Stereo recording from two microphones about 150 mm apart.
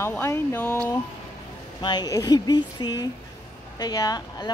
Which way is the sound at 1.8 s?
30° left (ahead or behind).